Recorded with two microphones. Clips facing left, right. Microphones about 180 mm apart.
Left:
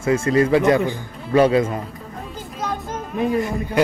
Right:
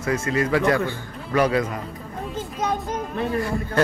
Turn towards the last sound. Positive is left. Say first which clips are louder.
# left 3 dB
turn(degrees=15)  # may be behind; listen again after turning